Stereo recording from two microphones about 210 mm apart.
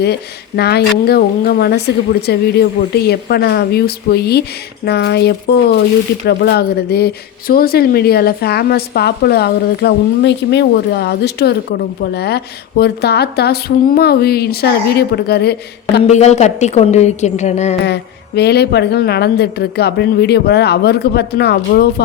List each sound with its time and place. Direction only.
0.0 s speech: 50° left (ahead or behind)
16.0 s a woman's voice: 30° left (ahead or behind)
17.8 s speech: 50° left (ahead or behind)